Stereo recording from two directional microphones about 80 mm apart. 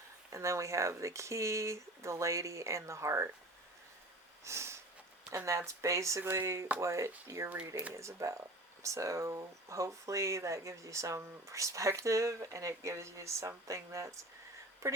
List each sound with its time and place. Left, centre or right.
0.3 s speech: right
4.4 s sniff: right
5.5 s speech: right